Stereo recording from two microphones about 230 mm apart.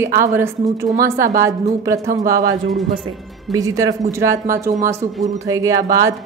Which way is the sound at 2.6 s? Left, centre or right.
Centre.